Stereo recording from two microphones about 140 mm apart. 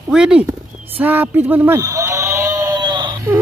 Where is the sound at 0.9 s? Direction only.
15° right (ahead or behind); by 3.2 s 35° right (ahead or behind).